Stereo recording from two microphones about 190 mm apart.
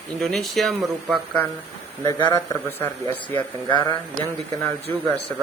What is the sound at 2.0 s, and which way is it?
Speech, 15° left (ahead or behind).